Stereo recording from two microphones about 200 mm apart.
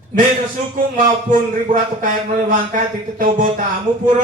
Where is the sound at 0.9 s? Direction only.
40° right (ahead or behind).